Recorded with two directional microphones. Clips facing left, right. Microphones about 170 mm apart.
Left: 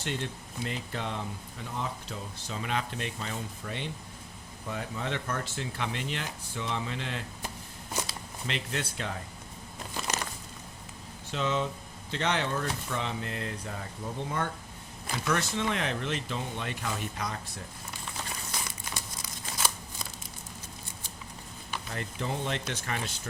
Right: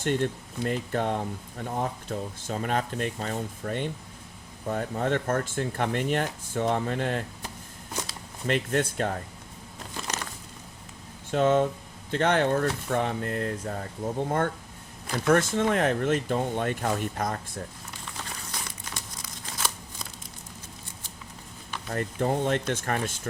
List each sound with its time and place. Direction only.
0.0 s speech: 50° right (ahead or behind)
8.4 s speech: 50° right (ahead or behind)
10.1 s a sound: 5° left (ahead or behind)
11.3 s speech: 50° right (ahead or behind)
18.6 s crumpling: 5° left (ahead or behind)
21.9 s speech: 50° right (ahead or behind)